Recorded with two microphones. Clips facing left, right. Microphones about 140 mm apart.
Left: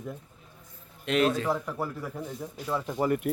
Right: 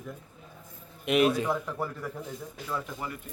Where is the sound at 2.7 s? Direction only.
25° left (ahead or behind).